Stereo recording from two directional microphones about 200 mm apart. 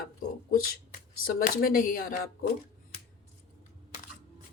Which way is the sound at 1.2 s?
45° left (ahead or behind).